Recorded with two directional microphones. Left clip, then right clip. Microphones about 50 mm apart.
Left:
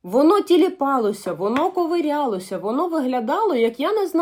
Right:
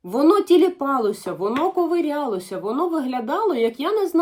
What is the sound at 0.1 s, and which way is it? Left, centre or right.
Speech, left.